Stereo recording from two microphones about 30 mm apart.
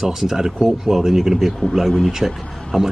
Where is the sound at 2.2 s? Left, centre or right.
Right.